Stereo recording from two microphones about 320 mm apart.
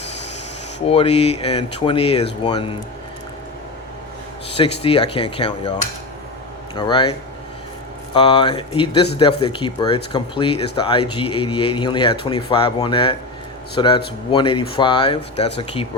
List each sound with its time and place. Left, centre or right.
0.9 s speech: centre
4.5 s speech: centre